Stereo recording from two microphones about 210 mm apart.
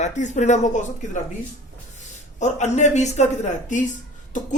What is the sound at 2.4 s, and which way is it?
A man's voice, 35° left (ahead or behind).